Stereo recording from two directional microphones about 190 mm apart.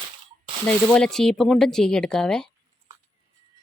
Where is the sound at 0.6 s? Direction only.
5° left (ahead or behind).